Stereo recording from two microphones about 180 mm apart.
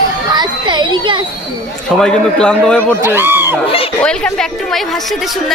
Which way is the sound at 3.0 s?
10° right (ahead or behind).